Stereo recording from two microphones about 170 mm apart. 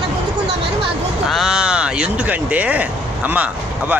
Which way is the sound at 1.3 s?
Centre (ahead or behind).